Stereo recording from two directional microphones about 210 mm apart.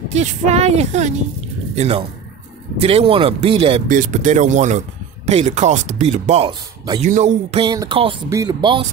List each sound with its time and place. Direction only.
0.1 s speech: 35° right (ahead or behind)
3.9 s speech: 40° right (ahead or behind); by 8.8 s 20° right (ahead or behind)